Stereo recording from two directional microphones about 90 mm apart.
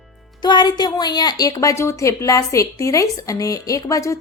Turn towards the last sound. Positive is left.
turn(degrees=35)  # may be behind; listen again after turning